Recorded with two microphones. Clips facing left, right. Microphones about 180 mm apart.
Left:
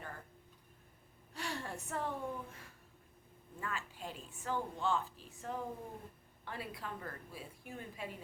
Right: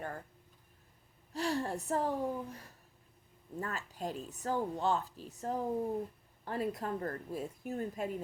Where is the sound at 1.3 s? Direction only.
35° right (ahead or behind).